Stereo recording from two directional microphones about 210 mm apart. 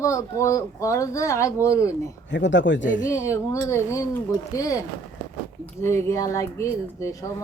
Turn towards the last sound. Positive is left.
turn(degrees=15)  # may be behind; listen again after turning